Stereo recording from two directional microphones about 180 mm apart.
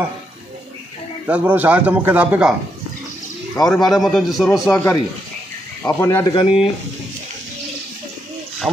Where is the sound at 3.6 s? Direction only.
Centre (ahead or behind).